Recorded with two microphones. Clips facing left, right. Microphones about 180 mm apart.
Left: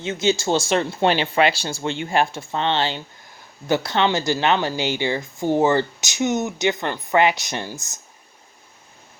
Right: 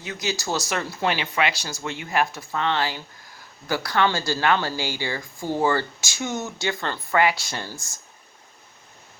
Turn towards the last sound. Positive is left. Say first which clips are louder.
# left 4 dB
turn(degrees=20)  # may be behind; listen again after turning